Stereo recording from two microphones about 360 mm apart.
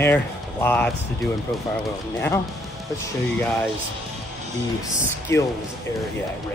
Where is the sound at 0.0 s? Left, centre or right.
Centre.